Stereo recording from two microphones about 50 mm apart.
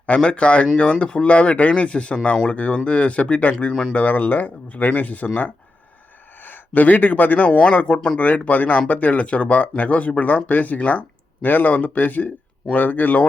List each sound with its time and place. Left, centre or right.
0.0 s speech: left